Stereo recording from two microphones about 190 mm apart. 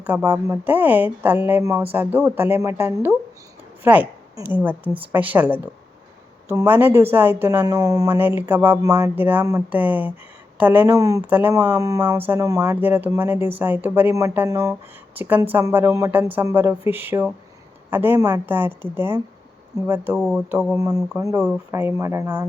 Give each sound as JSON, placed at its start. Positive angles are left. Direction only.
{"t": 0.0, "sound": "speech", "side_deg": -10}
{"t": 20.1, "sound": "a sound", "side_deg": 0}
{"t": 20.7, "sound": "speech", "side_deg": -20}